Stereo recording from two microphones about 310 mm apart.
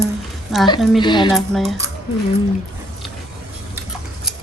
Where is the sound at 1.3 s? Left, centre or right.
Centre.